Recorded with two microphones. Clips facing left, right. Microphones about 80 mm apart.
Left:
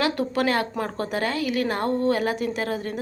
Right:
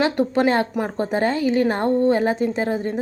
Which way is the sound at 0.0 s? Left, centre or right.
Right.